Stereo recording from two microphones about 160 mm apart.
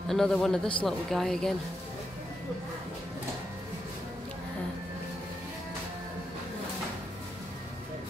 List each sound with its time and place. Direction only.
0.1 s speech: centre (ahead or behind)